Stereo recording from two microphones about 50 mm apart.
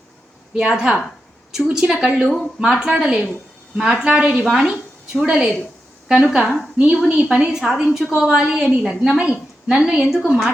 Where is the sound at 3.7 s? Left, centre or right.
Centre.